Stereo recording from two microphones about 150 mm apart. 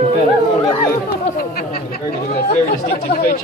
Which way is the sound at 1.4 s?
85° left.